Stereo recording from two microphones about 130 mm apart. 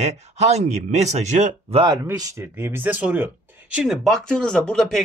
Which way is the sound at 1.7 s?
35° right (ahead or behind).